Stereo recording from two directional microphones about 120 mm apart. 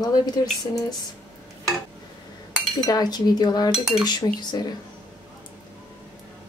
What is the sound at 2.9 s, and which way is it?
Speech, 35° left (ahead or behind).